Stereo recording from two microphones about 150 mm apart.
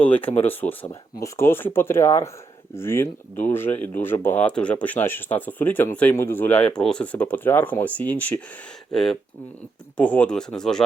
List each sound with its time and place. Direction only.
0.0 s speech: 10° left (ahead or behind)